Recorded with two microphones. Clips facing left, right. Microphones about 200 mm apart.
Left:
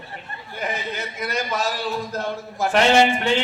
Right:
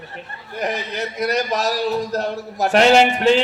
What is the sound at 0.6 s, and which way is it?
A man's voice, 40° right (ahead or behind).